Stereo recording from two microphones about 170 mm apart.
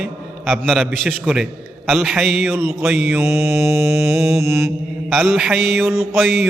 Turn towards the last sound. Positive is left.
turn(degrees=0)  # may be behind; listen again after turning